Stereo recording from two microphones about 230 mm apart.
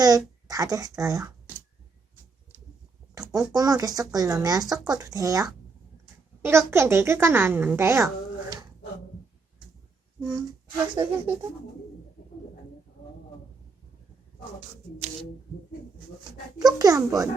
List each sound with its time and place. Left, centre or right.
0.4 s speech: centre
3.2 s speech: centre
10.2 s music: centre
10.9 s speech: centre
16.6 s speech: centre